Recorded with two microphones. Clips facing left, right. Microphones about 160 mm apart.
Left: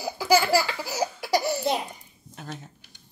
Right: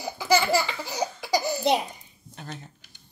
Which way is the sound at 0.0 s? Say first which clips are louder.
Left 1 dB; 5° left (ahead or behind).